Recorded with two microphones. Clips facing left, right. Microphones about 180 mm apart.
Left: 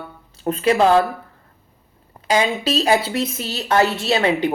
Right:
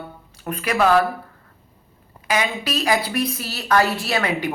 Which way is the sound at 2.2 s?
30° left (ahead or behind).